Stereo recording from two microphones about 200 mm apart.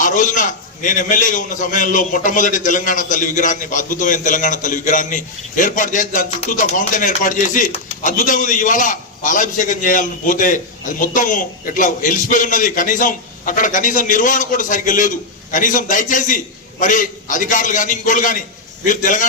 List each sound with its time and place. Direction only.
0.0 s a man's voice: 40° left (ahead or behind)